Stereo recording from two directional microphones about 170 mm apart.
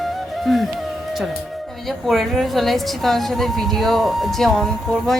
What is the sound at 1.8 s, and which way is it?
A woman's voice, centre (ahead or behind).